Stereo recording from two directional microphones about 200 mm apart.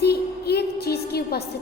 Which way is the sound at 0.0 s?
55° left (ahead or behind).